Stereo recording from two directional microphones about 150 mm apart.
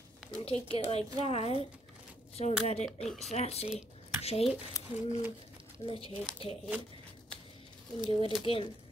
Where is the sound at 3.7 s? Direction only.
45° left (ahead or behind).